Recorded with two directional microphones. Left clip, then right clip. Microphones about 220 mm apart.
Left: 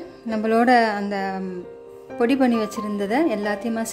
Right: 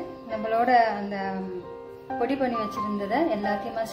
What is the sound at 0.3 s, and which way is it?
Speech, 55° left (ahead or behind).